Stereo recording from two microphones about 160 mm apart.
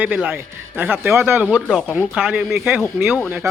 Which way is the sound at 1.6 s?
5° left (ahead or behind).